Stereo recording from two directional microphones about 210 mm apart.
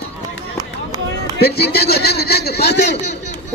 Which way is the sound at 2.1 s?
50° left (ahead or behind).